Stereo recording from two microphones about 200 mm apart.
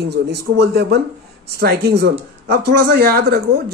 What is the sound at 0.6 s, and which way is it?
Speech, 55° right (ahead or behind).